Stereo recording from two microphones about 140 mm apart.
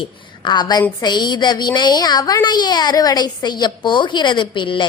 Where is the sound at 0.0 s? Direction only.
30° left (ahead or behind).